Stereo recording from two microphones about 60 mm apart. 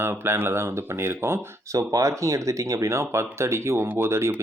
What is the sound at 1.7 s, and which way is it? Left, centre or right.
Speech, right.